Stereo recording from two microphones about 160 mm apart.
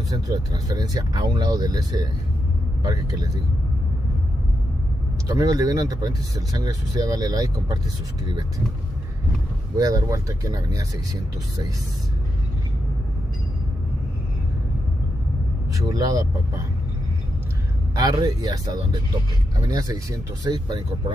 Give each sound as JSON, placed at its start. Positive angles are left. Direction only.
{"t": 0.1, "sound": "speech", "side_deg": -25}
{"t": 5.3, "sound": "speech", "side_deg": -20}
{"t": 9.8, "sound": "speech", "side_deg": -20}
{"t": 15.9, "sound": "speech", "side_deg": -20}
{"t": 17.9, "sound": "speech", "side_deg": -25}